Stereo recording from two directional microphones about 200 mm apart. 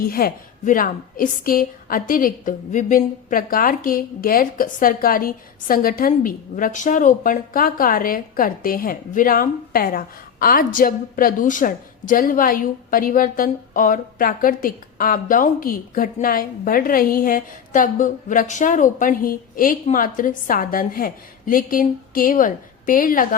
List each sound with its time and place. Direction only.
0.0 s a woman's voice: 45° left (ahead or behind)